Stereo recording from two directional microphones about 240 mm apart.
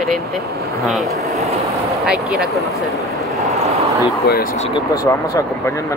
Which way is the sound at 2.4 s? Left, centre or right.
Centre.